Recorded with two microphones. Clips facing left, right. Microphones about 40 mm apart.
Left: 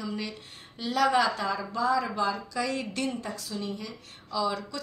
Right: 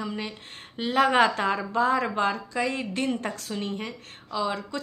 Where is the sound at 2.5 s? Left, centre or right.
Right.